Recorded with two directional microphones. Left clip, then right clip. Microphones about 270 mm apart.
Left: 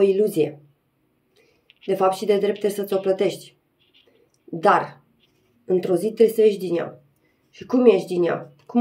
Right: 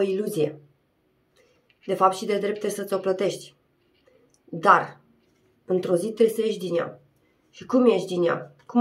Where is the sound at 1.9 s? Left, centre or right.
Centre.